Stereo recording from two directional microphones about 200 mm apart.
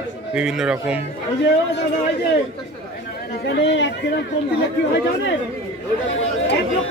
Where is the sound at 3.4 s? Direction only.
60° left (ahead or behind).